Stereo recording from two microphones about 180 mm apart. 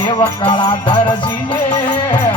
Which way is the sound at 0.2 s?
25° left (ahead or behind).